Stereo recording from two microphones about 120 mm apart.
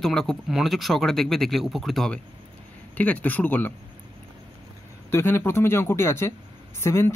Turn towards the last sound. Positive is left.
turn(degrees=20)  # may be behind; listen again after turning